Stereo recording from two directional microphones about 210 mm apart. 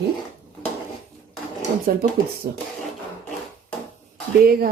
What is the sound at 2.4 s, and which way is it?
Speech, 45° right (ahead or behind).